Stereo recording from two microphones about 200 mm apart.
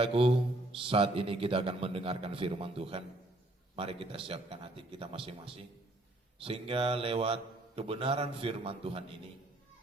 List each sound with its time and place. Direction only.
0.0 s a man's voice: 30° right (ahead or behind)